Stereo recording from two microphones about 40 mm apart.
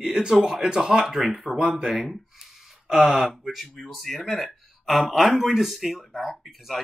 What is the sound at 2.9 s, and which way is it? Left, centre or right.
Speech, centre.